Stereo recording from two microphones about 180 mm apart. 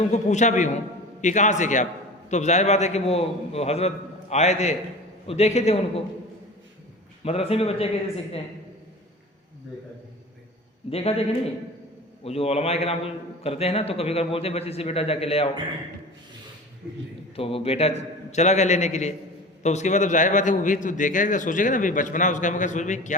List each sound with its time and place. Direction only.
0.0 s a man's voice: 40° left (ahead or behind)
7.3 s a man's voice: 35° left (ahead or behind)
10.8 s a man's voice: 30° left (ahead or behind)
12.2 s a man's voice: 35° left (ahead or behind)
17.3 s a man's voice: 30° left (ahead or behind)